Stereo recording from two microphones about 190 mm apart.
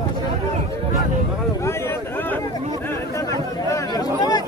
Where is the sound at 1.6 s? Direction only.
15° left (ahead or behind).